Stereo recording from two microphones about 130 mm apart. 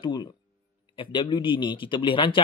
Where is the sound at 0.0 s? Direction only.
35° left (ahead or behind).